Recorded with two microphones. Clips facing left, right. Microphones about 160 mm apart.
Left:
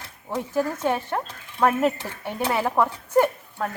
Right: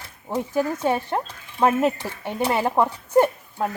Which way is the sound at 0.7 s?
10° right (ahead or behind).